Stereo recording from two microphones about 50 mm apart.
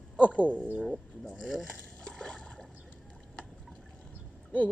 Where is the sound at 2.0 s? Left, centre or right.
Centre.